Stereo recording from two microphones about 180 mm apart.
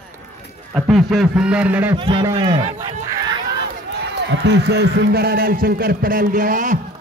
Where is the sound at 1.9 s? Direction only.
25° right (ahead or behind).